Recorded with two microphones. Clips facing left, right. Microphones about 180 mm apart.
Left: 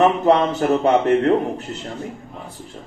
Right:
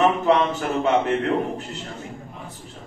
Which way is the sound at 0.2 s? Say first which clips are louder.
Left 4 dB; 40° left (ahead or behind).